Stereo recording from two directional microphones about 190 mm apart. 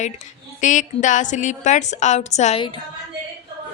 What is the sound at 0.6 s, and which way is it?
Speech, 40° left (ahead or behind).